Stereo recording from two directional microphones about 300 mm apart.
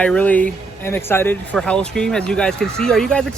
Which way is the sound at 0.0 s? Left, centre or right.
Centre.